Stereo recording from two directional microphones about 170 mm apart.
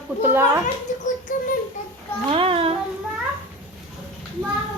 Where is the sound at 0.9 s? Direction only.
45° left (ahead or behind).